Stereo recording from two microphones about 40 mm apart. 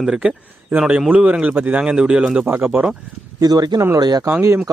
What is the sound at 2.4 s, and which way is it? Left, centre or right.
Speech, right.